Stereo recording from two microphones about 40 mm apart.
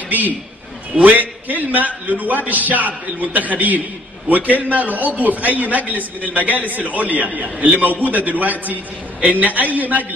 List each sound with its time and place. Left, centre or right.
0.9 s a man's voice: right